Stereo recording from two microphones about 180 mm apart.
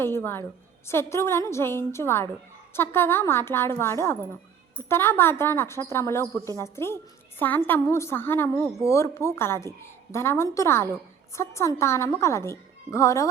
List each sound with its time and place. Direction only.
0.0 s a woman's voice: 10° left (ahead or behind)